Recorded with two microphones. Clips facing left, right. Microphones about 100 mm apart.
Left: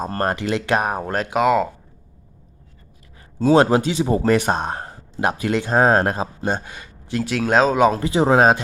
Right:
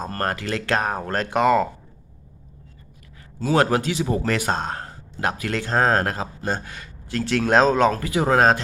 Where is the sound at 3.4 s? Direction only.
25° left (ahead or behind).